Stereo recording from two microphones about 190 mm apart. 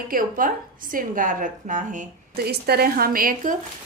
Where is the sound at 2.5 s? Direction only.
55° right (ahead or behind).